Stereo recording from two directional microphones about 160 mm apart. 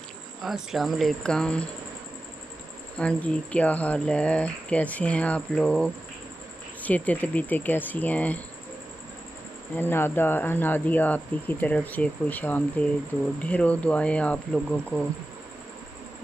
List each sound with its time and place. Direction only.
0.4 s speech: centre (ahead or behind)
3.0 s speech: 5° left (ahead or behind)
9.8 s speech: 15° left (ahead or behind)